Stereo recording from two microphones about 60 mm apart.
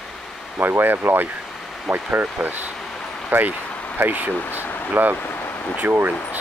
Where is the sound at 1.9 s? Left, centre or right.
Centre.